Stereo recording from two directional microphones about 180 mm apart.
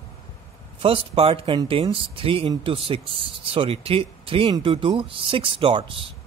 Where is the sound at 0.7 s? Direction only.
30° right (ahead or behind).